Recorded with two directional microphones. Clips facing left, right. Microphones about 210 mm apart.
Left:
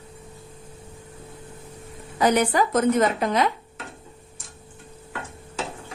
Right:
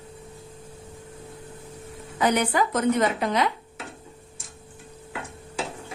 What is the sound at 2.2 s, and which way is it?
A woman's voice, 40° left (ahead or behind).